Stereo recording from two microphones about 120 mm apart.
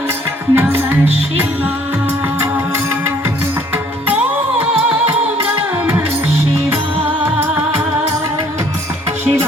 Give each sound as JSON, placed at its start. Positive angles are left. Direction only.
{"t": 0.6, "sound": "music", "side_deg": -20}